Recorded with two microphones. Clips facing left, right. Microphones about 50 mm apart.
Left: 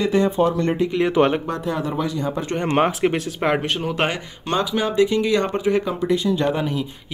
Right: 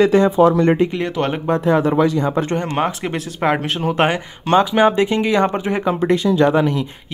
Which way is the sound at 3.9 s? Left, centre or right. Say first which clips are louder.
Right 5 dB; centre.